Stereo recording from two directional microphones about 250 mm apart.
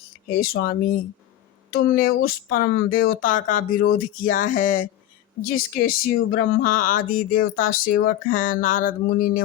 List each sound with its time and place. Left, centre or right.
0.3 s speech: left